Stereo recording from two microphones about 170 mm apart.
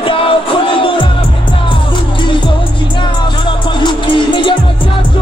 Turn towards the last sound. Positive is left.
turn(degrees=30)  # may be behind; listen again after turning